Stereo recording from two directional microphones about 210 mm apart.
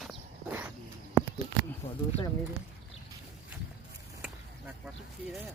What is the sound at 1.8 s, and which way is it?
Speech, 25° left (ahead or behind).